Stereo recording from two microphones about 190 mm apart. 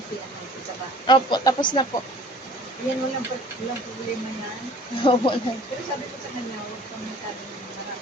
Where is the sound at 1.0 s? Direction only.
25° left (ahead or behind).